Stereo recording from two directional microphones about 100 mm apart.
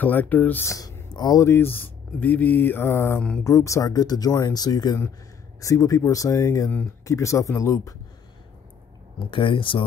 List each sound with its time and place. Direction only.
0.0 s speech: 15° left (ahead or behind)
0.7 s speech: 35° left (ahead or behind)
1.4 s speech: 25° left (ahead or behind)
9.2 s speech: 55° left (ahead or behind)